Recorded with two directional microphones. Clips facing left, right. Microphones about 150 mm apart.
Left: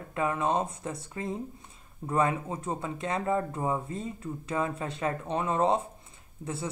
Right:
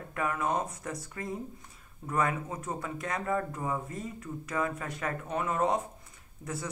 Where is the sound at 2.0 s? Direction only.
30° left (ahead or behind).